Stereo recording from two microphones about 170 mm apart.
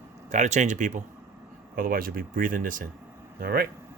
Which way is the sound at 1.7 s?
55° right (ahead or behind).